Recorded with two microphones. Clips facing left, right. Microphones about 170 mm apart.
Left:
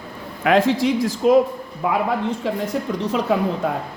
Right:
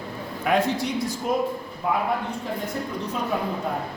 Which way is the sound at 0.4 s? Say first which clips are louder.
Left 6 dB; 90° left.